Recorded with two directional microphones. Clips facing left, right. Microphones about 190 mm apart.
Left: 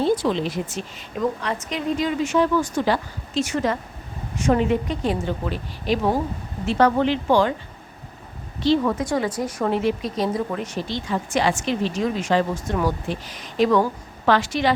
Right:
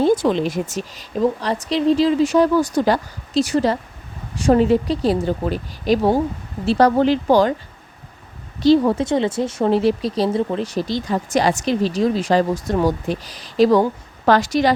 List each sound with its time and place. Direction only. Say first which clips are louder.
0.0 s speech: right 4 dB; 50° right (ahead or behind)
8.6 s speech: right 6 dB; 35° right (ahead or behind)